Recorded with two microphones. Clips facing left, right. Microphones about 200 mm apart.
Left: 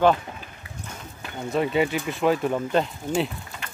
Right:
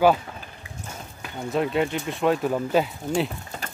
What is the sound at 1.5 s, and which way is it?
Speech, centre (ahead or behind).